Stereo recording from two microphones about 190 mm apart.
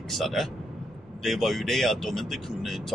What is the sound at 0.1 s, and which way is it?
A man's voice, centre (ahead or behind).